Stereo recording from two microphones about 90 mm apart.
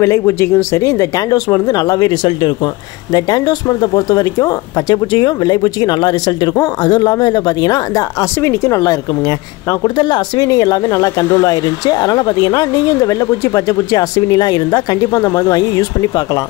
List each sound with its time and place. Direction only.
0.0 s speech: 30° left (ahead or behind); by 2.7 s 55° left (ahead or behind)
3.1 s speech: 45° left (ahead or behind)
8.4 s speech: 30° left (ahead or behind)
9.8 s speech: 55° left (ahead or behind)